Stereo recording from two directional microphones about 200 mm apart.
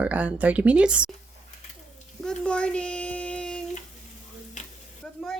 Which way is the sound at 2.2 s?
5° left (ahead or behind).